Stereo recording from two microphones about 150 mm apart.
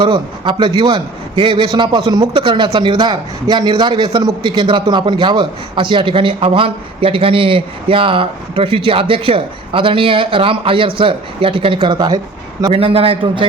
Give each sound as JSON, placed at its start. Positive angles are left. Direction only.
{"t": 0.0, "sound": "a man's voice", "side_deg": -30}
{"t": 12.6, "sound": "a man's voice", "side_deg": -40}